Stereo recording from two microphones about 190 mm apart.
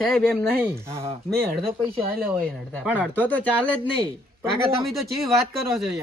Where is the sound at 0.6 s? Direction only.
15° right (ahead or behind).